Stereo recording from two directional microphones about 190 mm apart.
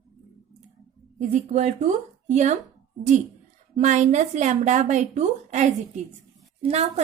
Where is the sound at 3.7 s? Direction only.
40° right (ahead or behind).